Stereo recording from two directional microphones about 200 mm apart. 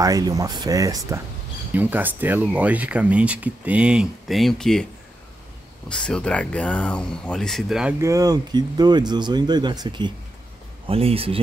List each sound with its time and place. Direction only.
0.0 s speech: 15° right (ahead or behind); by 4.8 s centre (ahead or behind)
5.9 s speech: 5° left (ahead or behind)
8.0 s speech: 15° right (ahead or behind)